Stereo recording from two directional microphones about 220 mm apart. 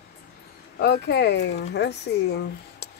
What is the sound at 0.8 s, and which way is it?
Speech, 50° left (ahead or behind).